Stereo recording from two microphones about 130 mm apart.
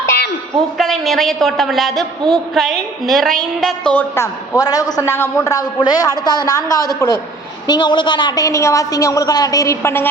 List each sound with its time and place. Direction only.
0.8 s a woman's voice: centre (ahead or behind)
3.9 s a woman's voice: 20° left (ahead or behind)